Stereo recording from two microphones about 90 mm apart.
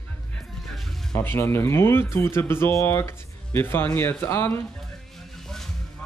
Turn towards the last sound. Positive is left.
turn(degrees=25)  # may be behind; listen again after turning